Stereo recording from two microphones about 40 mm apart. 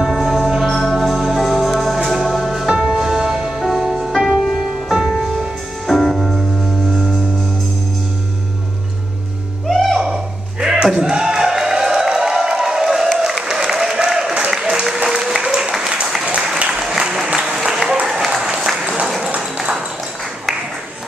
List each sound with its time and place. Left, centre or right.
0.0 s music: centre
2.7 s music: right
5.9 s music: centre
9.7 s music: centre
9.9 s a sound: centre
13.2 s applause: centre
16.5 s applause: right
17.1 s applause: centre
19.0 s a sound: centre
19.5 s a sound: centre